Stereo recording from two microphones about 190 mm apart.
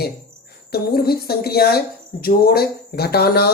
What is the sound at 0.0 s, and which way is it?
Speech, 55° left (ahead or behind).